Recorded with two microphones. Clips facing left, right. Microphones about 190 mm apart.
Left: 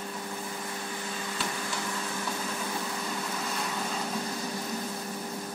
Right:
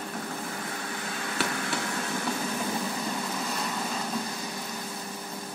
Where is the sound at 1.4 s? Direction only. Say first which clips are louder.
Right 6 dB; 70° right (ahead or behind).